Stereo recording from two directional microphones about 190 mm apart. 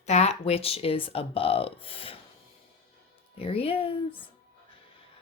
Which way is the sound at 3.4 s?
30° left (ahead or behind).